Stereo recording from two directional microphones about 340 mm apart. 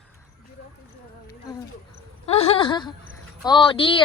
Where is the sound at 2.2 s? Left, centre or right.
Centre.